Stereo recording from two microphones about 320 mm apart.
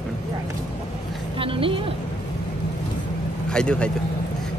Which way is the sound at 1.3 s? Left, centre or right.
Centre.